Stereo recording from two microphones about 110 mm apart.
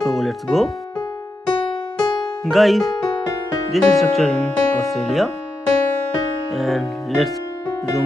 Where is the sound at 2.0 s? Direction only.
40° left (ahead or behind).